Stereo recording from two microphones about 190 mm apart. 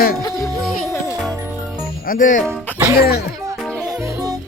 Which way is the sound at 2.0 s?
45° left (ahead or behind).